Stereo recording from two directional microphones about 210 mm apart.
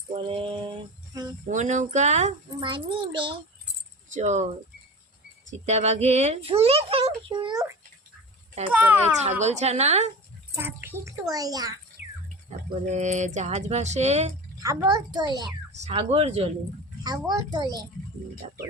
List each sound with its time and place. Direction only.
0.2 s mantra: 25° right (ahead or behind)
1.5 s speech: 35° right (ahead or behind)
5.6 s a child's voice: 30° right (ahead or behind); by 9.1 s 10° right (ahead or behind)
9.4 s speech: 30° right (ahead or behind)
10.5 s a child's voice: 10° right (ahead or behind)
12.5 s speech: 35° right (ahead or behind)
14.6 s a child's voice: 15° right (ahead or behind)